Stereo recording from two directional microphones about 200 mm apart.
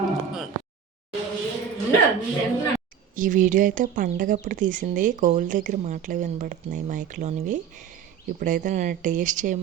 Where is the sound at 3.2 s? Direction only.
40° right (ahead or behind).